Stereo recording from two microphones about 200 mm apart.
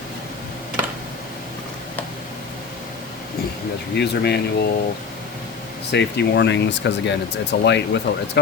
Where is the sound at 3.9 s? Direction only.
55° left (ahead or behind).